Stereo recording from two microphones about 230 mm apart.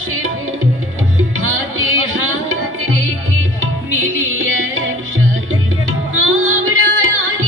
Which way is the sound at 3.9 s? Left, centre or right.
Right.